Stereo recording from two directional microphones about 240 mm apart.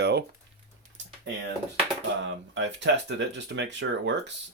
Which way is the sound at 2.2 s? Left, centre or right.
Right.